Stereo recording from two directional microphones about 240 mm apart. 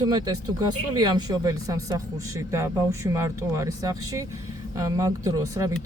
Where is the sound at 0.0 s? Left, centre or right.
Centre.